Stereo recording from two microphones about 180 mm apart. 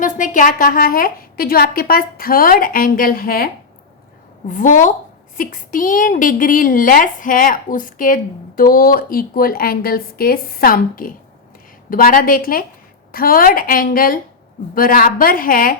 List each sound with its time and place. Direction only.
0.0 s a woman's voice: 45° left (ahead or behind)